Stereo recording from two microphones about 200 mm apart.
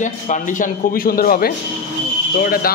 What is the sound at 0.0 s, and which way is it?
A man's voice, 40° left (ahead or behind).